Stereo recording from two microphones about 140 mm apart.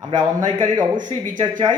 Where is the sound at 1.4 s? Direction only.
35° right (ahead or behind).